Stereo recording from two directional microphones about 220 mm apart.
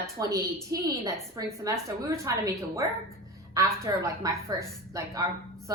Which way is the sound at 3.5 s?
15° right (ahead or behind).